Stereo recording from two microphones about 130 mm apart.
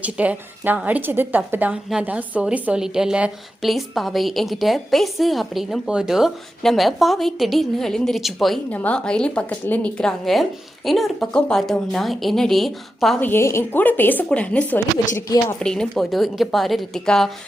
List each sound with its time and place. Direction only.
0.0 s a woman's voice: 10° right (ahead or behind)
8.7 s a woman's voice: 10° left (ahead or behind)
13.1 s a woman's voice: 15° left (ahead or behind)
15.1 s speech: 25° left (ahead or behind)
15.5 s a woman's voice: 5° left (ahead or behind)